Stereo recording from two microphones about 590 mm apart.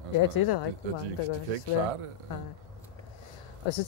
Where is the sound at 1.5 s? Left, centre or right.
Right.